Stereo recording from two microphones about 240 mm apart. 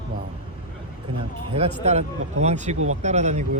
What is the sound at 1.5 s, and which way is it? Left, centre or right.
A man's voice, right.